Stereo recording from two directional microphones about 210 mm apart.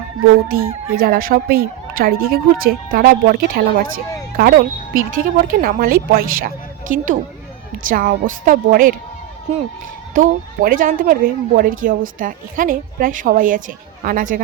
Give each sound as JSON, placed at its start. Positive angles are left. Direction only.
{"t": 0.4, "sound": "a woman's voice", "side_deg": -45}
{"t": 10.2, "sound": "a woman's voice", "side_deg": -40}